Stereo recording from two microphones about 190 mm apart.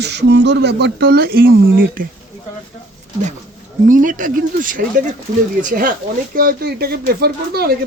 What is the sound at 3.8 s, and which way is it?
Speech, 45° right (ahead or behind).